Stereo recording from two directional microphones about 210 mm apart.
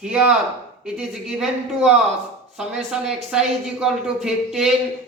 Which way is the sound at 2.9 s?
5° right (ahead or behind).